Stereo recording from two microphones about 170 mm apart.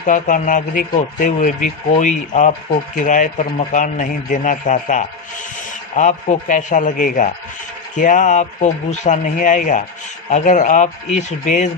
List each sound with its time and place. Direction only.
0.0 s speech: 50° left (ahead or behind)